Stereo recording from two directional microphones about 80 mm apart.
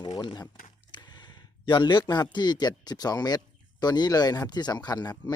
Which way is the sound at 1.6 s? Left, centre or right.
Left.